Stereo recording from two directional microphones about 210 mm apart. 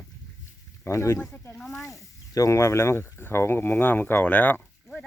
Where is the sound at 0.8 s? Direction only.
15° left (ahead or behind).